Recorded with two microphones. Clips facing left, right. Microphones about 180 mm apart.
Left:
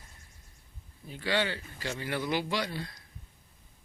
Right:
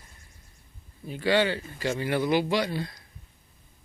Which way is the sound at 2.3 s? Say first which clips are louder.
Right 7 dB; 15° right (ahead or behind).